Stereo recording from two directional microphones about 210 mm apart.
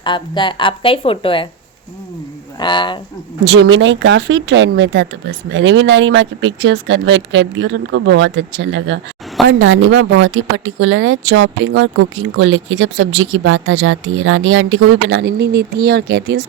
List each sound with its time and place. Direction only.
0.0 s a woman's voice: 20° left (ahead or behind)
2.6 s a woman's voice: 20° left (ahead or behind)
3.4 s speech: 55° right (ahead or behind)